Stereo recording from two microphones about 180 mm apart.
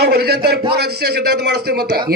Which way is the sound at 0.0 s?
65° right (ahead or behind).